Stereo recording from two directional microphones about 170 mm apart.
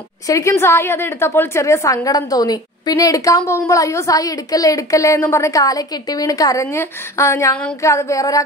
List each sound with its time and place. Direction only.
0.3 s a woman's voice: 15° left (ahead or behind)